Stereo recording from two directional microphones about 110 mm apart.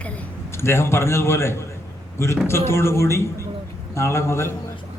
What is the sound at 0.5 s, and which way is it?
A man's voice, 25° left (ahead or behind).